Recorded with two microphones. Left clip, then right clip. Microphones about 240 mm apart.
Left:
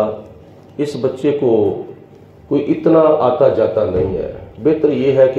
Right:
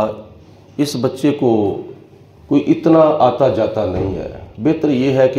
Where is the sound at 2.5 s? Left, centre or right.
Right.